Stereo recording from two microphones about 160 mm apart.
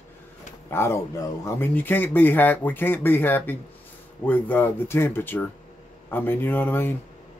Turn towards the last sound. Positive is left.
turn(degrees=15)  # may be behind; listen again after turning